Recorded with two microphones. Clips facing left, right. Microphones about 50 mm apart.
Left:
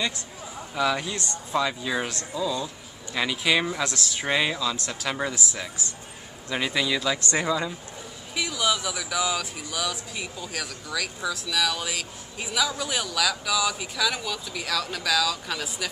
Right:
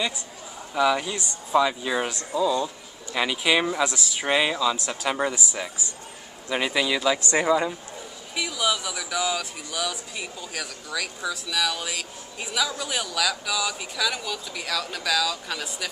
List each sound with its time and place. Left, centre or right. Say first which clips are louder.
0.7 s speech: right 3 dB; centre; by 7.7 s right
8.4 s speech: even; centre